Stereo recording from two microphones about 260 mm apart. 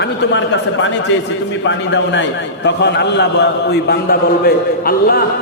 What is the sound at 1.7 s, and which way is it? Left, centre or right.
A man's voice, left.